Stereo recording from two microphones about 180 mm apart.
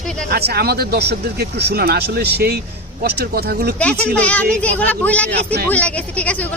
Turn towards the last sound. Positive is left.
turn(degrees=5)  # may be behind; listen again after turning